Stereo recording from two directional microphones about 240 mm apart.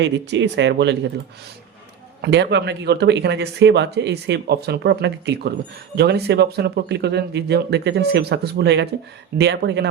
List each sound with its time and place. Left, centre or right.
0.0 s speech: right
2.2 s speech: right